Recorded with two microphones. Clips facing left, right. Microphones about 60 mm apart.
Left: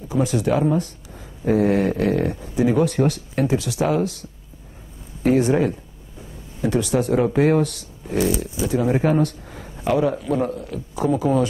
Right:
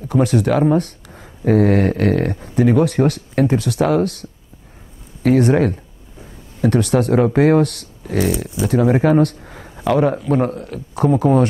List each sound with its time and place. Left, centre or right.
0.1 s a man's voice: right